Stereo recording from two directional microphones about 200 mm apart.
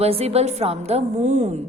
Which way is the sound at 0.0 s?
30° right (ahead or behind).